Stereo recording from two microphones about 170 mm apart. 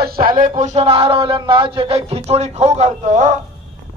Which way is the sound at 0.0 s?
60° right (ahead or behind).